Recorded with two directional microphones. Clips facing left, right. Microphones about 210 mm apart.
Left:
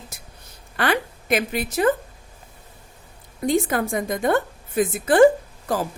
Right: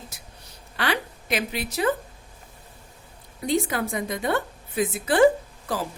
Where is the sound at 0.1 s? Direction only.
50° left (ahead or behind).